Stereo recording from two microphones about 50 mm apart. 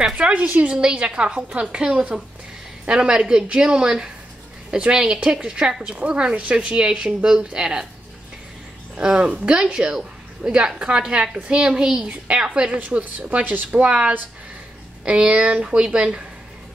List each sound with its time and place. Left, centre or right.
0.3 s a woman's voice: right
8.9 s a woman's voice: centre
12.1 s speech: right
12.7 s a woman's voice: right